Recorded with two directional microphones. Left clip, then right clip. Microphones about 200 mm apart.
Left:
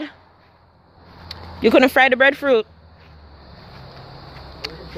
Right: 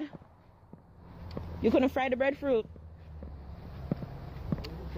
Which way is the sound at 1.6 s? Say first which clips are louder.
Left 14 dB; 30° left (ahead or behind).